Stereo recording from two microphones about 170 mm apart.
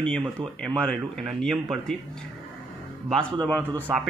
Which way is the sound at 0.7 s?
5° left (ahead or behind).